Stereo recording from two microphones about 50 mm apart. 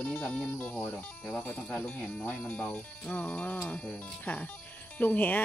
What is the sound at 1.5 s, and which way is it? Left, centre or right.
Speech, left.